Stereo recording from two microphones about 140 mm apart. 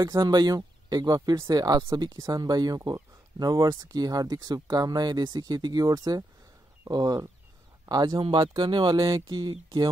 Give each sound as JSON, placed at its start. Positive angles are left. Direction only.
{"t": 0.0, "sound": "speech", "side_deg": -30}